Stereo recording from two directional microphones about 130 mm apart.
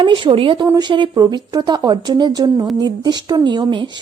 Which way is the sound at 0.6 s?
25° right (ahead or behind).